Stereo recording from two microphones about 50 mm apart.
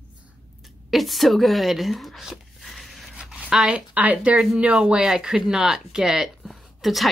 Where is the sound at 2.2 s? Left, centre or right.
Centre.